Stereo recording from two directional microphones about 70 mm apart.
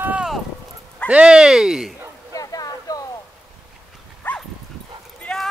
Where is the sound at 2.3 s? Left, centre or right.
Left.